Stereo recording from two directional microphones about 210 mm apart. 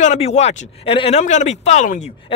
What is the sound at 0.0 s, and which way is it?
Speech, 35° left (ahead or behind).